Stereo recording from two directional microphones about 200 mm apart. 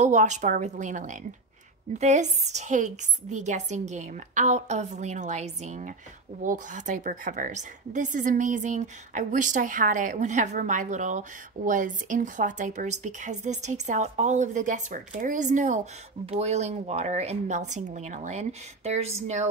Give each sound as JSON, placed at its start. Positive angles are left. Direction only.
{"t": 0.0, "sound": "a woman's voice", "side_deg": -35}